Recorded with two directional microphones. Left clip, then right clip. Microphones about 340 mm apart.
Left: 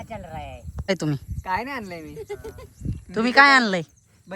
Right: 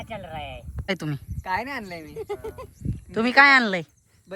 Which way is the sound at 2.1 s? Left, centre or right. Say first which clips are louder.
Right 2 dB; centre.